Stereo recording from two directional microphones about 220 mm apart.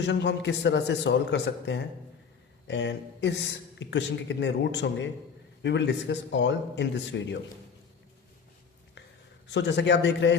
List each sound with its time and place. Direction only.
0.0 s a man's voice: 50° left (ahead or behind)
9.5 s a man's voice: 55° left (ahead or behind)